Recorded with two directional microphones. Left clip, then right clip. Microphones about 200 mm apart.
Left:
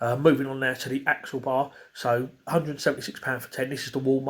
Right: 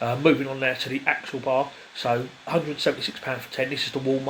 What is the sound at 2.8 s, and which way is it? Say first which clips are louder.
Speech: right 1 dB; 25° left (ahead or behind).